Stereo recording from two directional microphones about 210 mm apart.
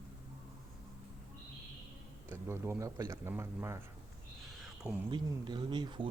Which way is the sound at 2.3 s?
10° right (ahead or behind).